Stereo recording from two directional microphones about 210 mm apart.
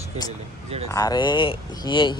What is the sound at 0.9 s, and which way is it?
Speech, 15° left (ahead or behind).